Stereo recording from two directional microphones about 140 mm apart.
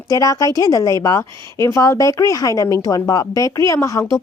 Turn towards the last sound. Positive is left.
turn(degrees=25)  # may be behind; listen again after turning